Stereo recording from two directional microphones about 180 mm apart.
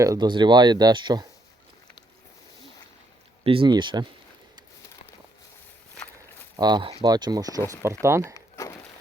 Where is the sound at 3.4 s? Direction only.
30° right (ahead or behind).